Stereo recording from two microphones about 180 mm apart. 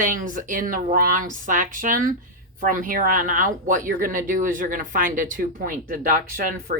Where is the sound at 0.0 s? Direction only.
45° right (ahead or behind).